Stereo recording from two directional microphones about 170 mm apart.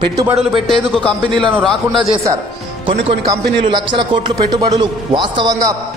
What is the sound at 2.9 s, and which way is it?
A man's voice, 30° right (ahead or behind).